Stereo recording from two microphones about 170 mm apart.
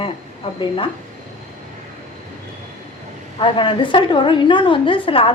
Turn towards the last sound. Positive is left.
turn(degrees=30)  # may be behind; listen again after turning